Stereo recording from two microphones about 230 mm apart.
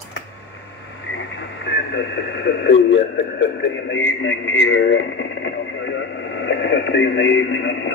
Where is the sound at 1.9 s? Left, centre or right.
Left.